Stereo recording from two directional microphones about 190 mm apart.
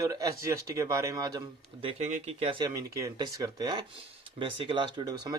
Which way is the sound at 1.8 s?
35° right (ahead or behind).